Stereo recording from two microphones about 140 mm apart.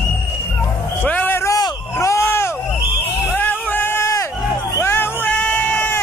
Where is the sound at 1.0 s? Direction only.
10° left (ahead or behind).